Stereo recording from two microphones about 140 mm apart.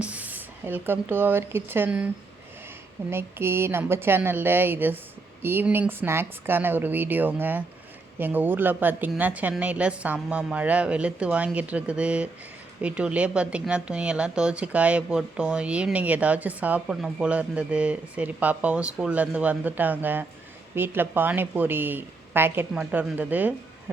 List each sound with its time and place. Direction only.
0.0 s speech: 10° right (ahead or behind)
3.1 s a woman's voice: 15° right (ahead or behind)